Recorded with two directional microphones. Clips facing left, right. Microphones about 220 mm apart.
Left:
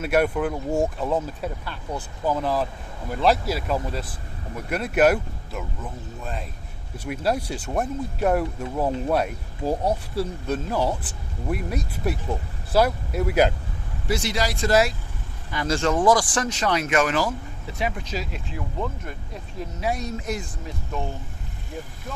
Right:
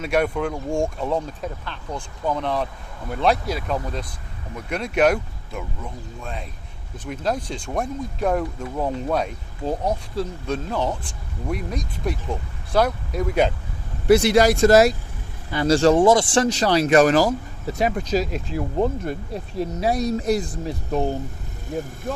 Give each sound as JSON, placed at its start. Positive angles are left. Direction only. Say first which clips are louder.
{"t": 0.0, "sound": "speech", "louder": "even", "side_deg": 5}
{"t": 14.1, "sound": "speech", "louder": "right 11 dB", "side_deg": -60}